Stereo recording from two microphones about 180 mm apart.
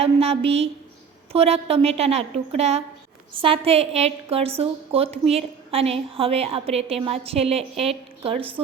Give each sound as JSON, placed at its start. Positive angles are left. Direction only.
{"t": 0.0, "sound": "a woman's voice", "side_deg": -35}